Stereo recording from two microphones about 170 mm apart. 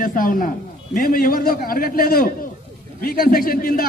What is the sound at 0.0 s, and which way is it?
A man's voice, 55° left (ahead or behind).